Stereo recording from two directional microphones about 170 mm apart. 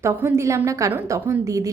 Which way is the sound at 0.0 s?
15° right (ahead or behind).